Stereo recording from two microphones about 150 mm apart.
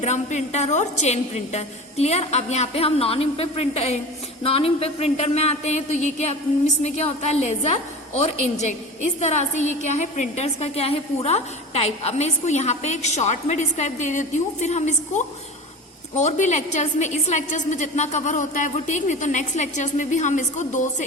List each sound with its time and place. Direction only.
0.0 s a woman's voice: 50° left (ahead or behind)